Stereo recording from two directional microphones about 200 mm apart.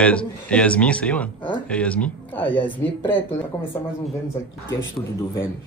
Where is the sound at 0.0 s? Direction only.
5° left (ahead or behind).